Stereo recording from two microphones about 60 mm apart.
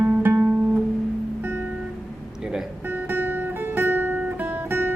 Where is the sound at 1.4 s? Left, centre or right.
Right.